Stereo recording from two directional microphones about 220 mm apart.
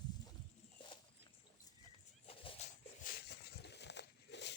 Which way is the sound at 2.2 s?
25° left (ahead or behind).